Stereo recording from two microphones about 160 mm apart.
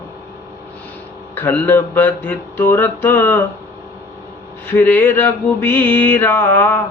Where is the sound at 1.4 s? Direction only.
10° left (ahead or behind).